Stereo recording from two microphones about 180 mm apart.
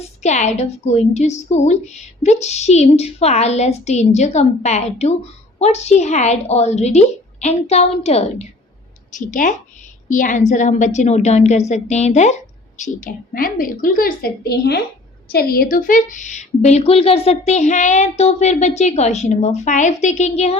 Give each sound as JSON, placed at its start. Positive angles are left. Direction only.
{"t": 0.2, "sound": "a woman's voice", "side_deg": 40}